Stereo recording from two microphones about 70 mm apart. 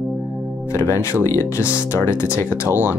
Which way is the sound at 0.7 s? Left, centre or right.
Left.